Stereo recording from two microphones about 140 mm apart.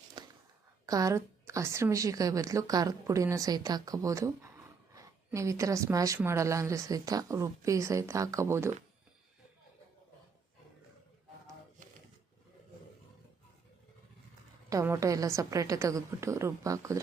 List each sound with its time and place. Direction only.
0.2 s a sound: 30° right (ahead or behind)
0.9 s a woman's voice: 25° right (ahead or behind)
14.7 s a woman's voice: 25° right (ahead or behind)